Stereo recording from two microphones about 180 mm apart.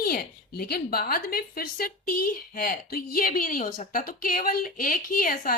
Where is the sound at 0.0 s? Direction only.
60° left (ahead or behind).